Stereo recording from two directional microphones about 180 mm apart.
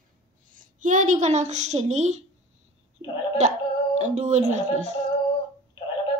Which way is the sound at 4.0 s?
40° right (ahead or behind).